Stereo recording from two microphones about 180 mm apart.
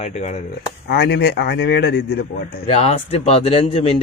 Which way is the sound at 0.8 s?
70° left (ahead or behind).